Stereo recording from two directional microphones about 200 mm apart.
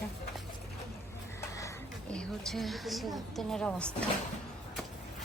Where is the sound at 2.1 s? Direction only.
5° left (ahead or behind).